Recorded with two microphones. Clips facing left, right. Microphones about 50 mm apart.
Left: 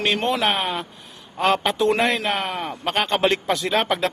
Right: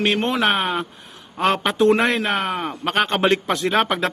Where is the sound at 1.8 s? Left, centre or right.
Right.